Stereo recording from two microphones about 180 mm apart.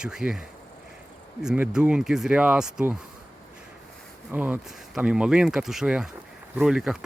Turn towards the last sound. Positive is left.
turn(degrees=-5)  # may be behind; listen again after turning